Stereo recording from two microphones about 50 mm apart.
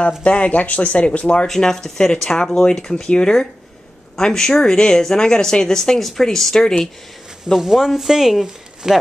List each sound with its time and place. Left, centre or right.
0.2 s speech: left
1.5 s speech: centre
7.5 s speech: centre